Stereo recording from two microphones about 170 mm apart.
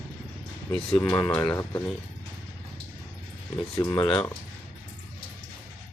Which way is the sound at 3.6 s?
25° left (ahead or behind).